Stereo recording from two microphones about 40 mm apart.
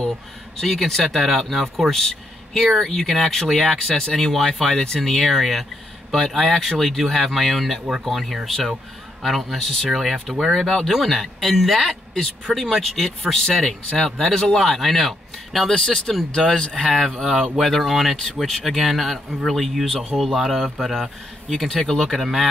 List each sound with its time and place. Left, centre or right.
0.6 s speech: centre
12.4 s speech: centre
13.4 s speech: centre
14.6 s speech: centre
17.2 s speech: centre
21.5 s speech: centre